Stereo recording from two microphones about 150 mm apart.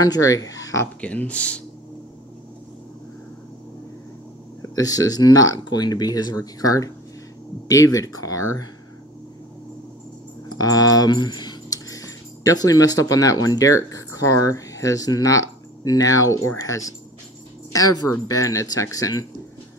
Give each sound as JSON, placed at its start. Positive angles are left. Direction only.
{"t": 0.0, "sound": "speech", "side_deg": 25}
{"t": 1.0, "sound": "speech", "side_deg": 10}
{"t": 4.6, "sound": "speech", "side_deg": 25}
{"t": 10.5, "sound": "speech", "side_deg": 25}